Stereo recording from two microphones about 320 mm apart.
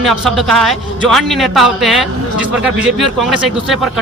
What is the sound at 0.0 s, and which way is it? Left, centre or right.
Speech, centre.